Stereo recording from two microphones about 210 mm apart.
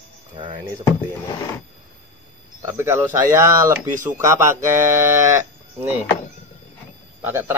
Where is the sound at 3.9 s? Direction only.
40° right (ahead or behind).